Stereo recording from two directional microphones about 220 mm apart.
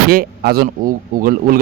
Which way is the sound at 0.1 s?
45° right (ahead or behind).